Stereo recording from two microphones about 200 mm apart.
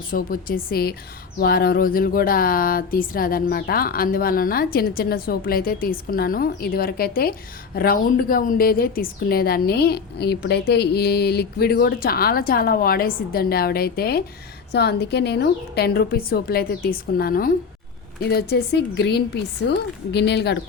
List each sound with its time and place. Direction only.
0.1 s a woman's voice: 45° left (ahead or behind)